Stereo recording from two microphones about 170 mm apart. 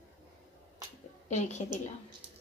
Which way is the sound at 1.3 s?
45° left (ahead or behind).